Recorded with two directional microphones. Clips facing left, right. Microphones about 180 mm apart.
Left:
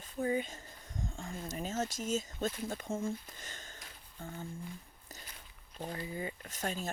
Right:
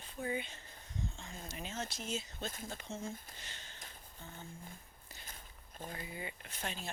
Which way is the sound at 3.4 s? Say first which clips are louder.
Left 4 dB; 45° left (ahead or behind).